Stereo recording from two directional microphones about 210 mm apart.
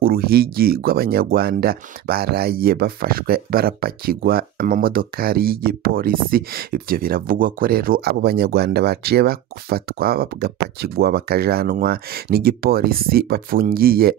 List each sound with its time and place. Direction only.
0.0 s speech: 45° right (ahead or behind)